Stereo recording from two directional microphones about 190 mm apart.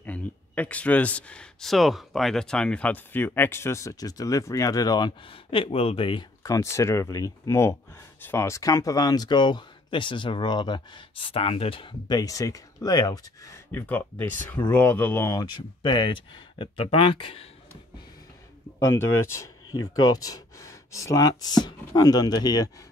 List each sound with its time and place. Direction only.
0.0 s speech: 10° left (ahead or behind); by 17.5 s 30° left (ahead or behind)
18.8 s speech: 15° left (ahead or behind)